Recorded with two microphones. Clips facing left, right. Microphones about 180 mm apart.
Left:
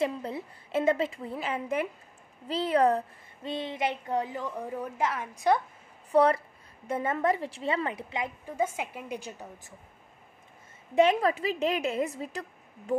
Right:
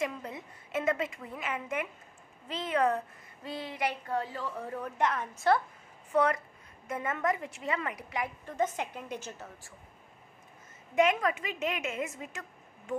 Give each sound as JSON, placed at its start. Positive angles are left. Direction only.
{"t": 0.0, "sound": "a woman's voice", "side_deg": 30}
{"t": 3.4, "sound": "a woman's voice", "side_deg": 25}
{"t": 6.1, "sound": "a woman's voice", "side_deg": 35}
{"t": 8.5, "sound": "a woman's voice", "side_deg": 10}
{"t": 11.0, "sound": "a woman's voice", "side_deg": 30}